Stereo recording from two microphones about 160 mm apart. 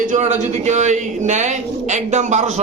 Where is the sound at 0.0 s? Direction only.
50° right (ahead or behind).